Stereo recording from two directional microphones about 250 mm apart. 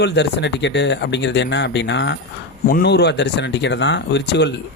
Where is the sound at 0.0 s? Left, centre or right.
Left.